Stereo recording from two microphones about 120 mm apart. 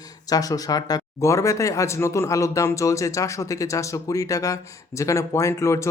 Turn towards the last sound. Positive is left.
turn(degrees=25)  # may be behind; listen again after turning